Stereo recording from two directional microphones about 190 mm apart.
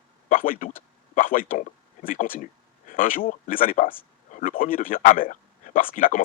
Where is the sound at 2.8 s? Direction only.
45° left (ahead or behind).